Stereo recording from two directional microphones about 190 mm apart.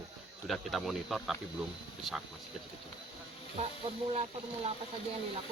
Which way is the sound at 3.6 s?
30° right (ahead or behind).